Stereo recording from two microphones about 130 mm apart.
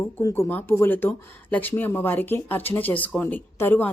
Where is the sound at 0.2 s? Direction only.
20° left (ahead or behind).